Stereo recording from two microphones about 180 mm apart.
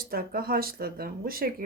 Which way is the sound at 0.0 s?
55° right (ahead or behind).